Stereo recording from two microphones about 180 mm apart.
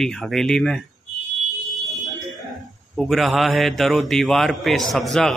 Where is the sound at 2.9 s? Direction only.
Centre (ahead or behind).